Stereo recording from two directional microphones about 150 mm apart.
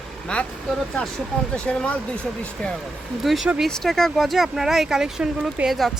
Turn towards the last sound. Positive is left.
turn(degrees=0)  # may be behind; listen again after turning